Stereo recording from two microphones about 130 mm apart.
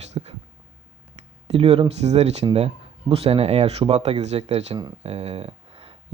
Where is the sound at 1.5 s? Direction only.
50° right (ahead or behind).